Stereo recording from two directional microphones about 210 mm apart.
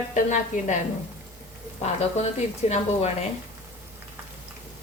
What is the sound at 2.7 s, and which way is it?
Speech, 30° left (ahead or behind).